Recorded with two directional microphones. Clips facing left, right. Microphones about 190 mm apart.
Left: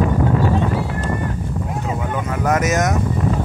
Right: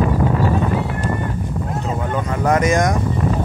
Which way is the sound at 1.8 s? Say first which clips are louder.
Right 2 dB; 10° left (ahead or behind).